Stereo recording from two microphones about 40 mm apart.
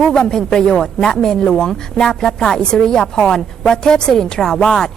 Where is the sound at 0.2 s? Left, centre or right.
Centre.